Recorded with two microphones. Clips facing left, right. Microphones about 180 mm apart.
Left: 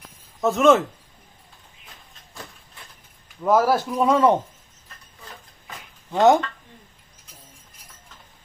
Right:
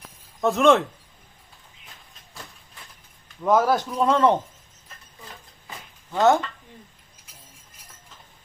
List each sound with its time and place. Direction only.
0.4 s speech: centre (ahead or behind)
3.2 s speech: 5° left (ahead or behind)
6.1 s speech: 15° left (ahead or behind)